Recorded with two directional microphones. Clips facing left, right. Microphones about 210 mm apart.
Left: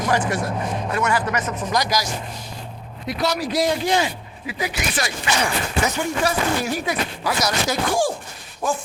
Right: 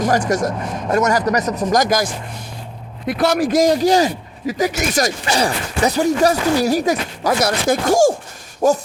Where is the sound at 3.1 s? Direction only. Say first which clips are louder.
Right 7 dB; 50° right (ahead or behind).